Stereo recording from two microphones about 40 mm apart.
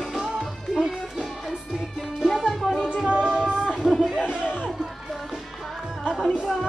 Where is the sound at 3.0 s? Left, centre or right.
Right.